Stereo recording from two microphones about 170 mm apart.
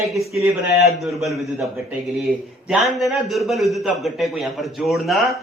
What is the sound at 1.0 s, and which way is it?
A man's voice, centre (ahead or behind).